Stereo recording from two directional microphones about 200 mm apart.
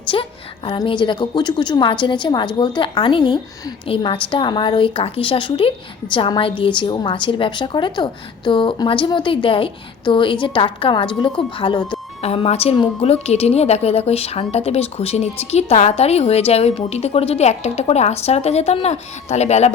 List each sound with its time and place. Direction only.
0.1 s a woman's voice: 25° left (ahead or behind)